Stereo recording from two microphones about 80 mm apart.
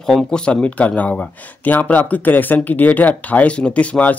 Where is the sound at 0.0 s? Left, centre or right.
Centre.